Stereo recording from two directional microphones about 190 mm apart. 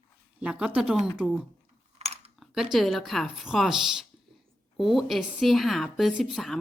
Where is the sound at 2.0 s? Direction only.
35° right (ahead or behind).